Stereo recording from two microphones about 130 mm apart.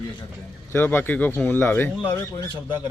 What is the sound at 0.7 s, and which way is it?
Speech, 15° left (ahead or behind).